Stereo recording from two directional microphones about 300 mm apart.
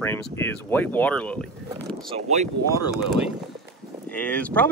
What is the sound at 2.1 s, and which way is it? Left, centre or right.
Speech, right.